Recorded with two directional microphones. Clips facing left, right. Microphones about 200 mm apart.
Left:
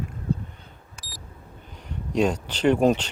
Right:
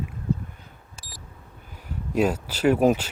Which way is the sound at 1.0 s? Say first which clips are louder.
Left 2 dB; 25° right (ahead or behind).